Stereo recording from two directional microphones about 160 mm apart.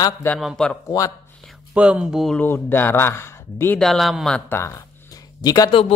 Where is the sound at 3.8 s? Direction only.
Centre (ahead or behind).